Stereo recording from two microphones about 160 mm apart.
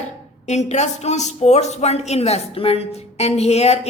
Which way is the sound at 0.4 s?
45° left (ahead or behind).